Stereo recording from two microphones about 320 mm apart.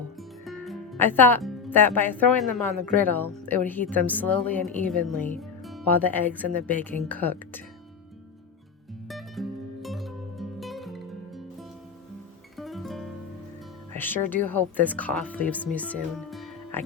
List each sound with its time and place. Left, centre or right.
0.2 s music: centre
1.1 s a woman's voice: centre
9.0 s music: centre
12.5 s music: centre
14.0 s a woman's voice: centre